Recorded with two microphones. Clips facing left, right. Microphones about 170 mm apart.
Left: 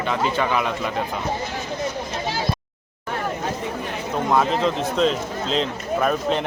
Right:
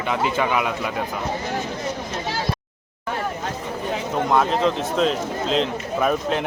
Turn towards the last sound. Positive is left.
turn(degrees=0)  # may be behind; listen again after turning